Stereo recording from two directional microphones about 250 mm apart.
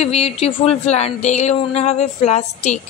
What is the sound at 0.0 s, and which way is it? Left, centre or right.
A woman's voice, left.